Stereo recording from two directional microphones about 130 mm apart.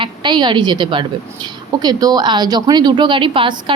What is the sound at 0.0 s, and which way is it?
A woman's voice, 35° right (ahead or behind).